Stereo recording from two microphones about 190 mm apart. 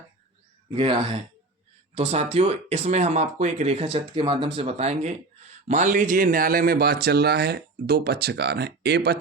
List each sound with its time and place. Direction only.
0.7 s speech: 30° right (ahead or behind); by 9.1 s 55° right (ahead or behind)